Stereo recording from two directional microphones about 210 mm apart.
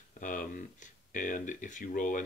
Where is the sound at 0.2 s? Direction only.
40° left (ahead or behind).